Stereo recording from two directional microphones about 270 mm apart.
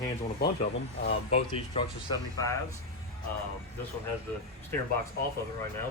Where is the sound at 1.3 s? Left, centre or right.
Centre.